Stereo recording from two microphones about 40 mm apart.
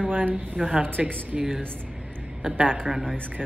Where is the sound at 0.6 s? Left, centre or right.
Right.